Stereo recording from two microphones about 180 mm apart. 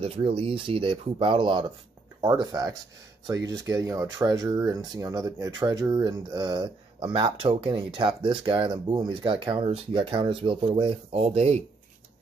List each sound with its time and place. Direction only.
0.0 s speech: 30° right (ahead or behind)